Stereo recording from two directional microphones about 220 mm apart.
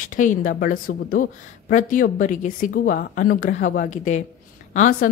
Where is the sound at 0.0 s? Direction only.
35° left (ahead or behind).